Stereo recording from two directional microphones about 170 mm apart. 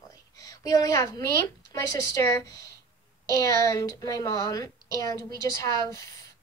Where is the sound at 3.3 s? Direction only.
20° left (ahead or behind).